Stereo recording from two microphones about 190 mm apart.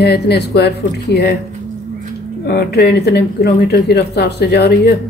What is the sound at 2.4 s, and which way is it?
Speech, 55° left (ahead or behind).